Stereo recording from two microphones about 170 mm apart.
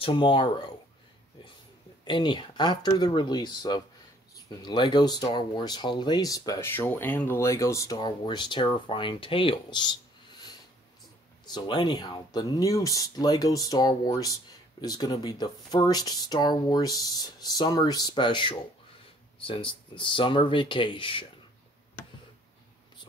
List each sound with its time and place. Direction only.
0.0 s speech: 30° left (ahead or behind)
2.0 s speech: 25° left (ahead or behind)